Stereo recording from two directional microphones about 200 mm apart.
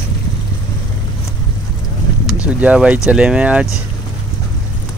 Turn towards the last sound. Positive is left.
turn(degrees=-5)  # may be behind; listen again after turning